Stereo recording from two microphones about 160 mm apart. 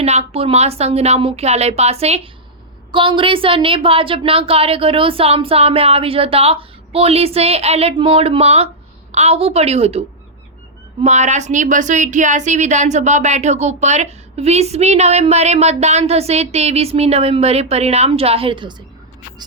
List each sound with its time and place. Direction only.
0.0 s speech: 40° right (ahead or behind)
11.0 s a woman's voice: 45° right (ahead or behind)